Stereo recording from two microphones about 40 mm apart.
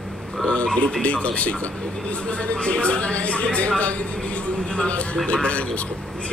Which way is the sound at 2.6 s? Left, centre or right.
Left.